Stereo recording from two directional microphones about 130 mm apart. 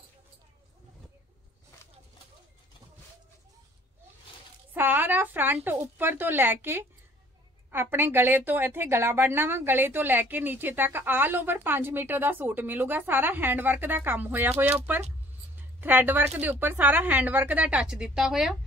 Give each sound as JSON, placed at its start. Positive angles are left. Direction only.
{"t": 4.7, "sound": "a woman's voice", "side_deg": -15}